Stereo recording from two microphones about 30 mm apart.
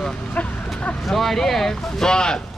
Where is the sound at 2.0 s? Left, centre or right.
Left.